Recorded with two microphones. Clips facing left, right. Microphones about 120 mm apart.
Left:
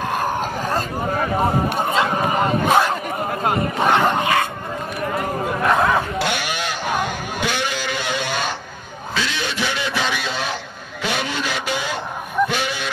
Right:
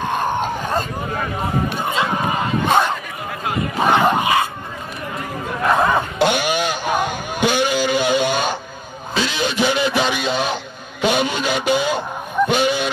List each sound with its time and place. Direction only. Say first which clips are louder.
0.0 s a sound: right 2 dB; 5° left (ahead or behind)
2.6 s speech: right 1 dB; 5° left (ahead or behind)
3.8 s crowd: right 2 dB; centre (ahead or behind)
5.6 s chatter: right 2 dB; centre (ahead or behind)
6.1 s a sound: right 5 dB; 20° right (ahead or behind)
12.4 s honk: right 6 dB; 20° right (ahead or behind)